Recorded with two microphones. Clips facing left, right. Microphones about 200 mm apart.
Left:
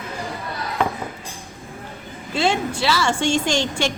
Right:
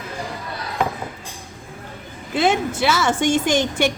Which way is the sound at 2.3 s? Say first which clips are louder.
Right 2 dB; 20° right (ahead or behind).